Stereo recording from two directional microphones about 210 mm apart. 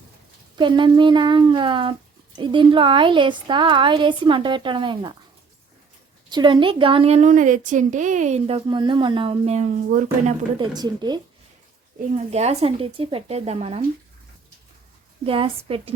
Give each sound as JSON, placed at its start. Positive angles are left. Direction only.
{"t": 0.5, "sound": "speech", "side_deg": -20}
{"t": 6.3, "sound": "speech", "side_deg": -20}
{"t": 10.6, "sound": "speech", "side_deg": -20}
{"t": 12.1, "sound": "speech", "side_deg": -30}
{"t": 15.2, "sound": "speech", "side_deg": -25}